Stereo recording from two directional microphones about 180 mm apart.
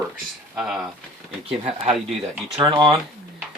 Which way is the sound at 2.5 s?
20° right (ahead or behind).